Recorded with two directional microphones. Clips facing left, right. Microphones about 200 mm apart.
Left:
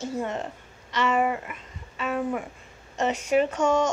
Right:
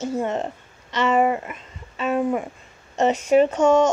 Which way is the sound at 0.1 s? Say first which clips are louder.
Right 5 dB; 25° right (ahead or behind).